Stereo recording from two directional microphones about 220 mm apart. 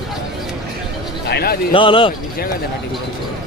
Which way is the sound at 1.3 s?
45° left (ahead or behind).